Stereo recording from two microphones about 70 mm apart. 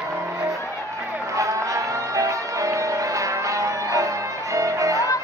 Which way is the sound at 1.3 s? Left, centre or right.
Right.